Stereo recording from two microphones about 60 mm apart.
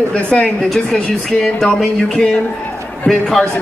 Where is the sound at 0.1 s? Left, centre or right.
Centre.